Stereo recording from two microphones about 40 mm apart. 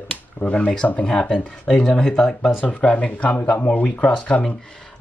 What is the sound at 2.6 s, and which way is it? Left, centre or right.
Speech, left.